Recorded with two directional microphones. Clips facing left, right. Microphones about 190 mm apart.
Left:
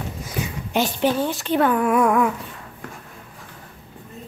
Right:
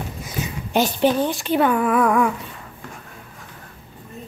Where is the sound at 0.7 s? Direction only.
35° right (ahead or behind).